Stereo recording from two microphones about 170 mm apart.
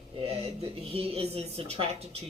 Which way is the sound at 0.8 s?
35° right (ahead or behind).